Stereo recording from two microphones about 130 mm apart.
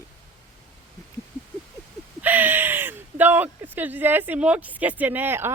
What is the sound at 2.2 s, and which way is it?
Speech, 15° right (ahead or behind).